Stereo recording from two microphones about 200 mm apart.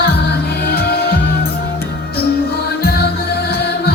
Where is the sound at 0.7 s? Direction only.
50° left (ahead or behind).